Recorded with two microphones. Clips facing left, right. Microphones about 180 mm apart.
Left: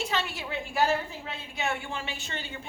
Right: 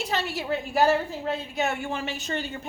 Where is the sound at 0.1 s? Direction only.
40° right (ahead or behind).